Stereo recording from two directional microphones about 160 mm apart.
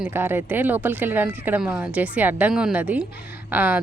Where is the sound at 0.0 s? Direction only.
15° right (ahead or behind).